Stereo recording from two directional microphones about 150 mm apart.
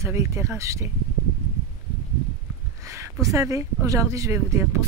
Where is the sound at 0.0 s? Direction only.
20° right (ahead or behind).